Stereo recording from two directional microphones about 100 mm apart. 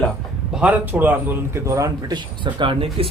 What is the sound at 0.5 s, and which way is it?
A man's voice, 15° right (ahead or behind).